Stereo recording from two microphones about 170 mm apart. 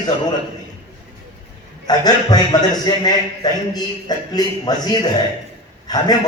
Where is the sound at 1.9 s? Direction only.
25° left (ahead or behind).